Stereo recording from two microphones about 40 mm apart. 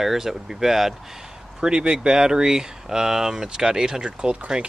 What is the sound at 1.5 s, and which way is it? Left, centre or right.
Speech, right.